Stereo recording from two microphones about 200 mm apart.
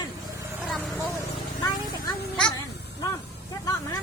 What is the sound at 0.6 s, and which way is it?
Speech, centre (ahead or behind).